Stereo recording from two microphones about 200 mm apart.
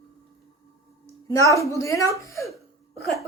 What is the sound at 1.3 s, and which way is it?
A woman's voice, 15° left (ahead or behind).